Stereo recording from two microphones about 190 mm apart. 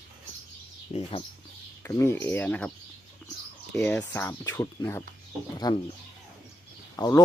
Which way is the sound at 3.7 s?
5° left (ahead or behind).